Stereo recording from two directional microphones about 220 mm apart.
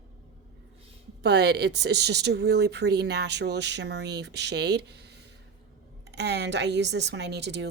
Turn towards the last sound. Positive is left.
turn(degrees=-50)  # may be behind; listen again after turning